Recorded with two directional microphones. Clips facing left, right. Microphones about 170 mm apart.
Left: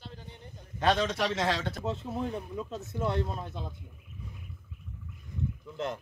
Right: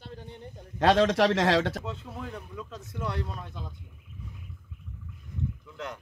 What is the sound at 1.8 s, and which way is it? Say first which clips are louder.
Speech: left 5 dB; 30° left (ahead or behind).